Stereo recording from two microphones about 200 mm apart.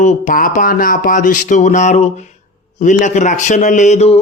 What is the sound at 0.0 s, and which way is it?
A man's voice, 40° left (ahead or behind).